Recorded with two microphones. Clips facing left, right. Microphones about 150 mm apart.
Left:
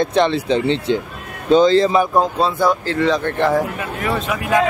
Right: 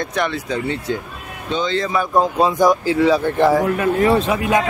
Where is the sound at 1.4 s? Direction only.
40° left (ahead or behind).